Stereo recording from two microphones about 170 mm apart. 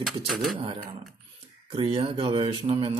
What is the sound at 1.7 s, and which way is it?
Speech, 30° right (ahead or behind).